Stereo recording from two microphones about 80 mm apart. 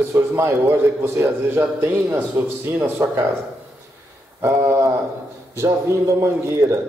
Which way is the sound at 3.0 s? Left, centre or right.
Right.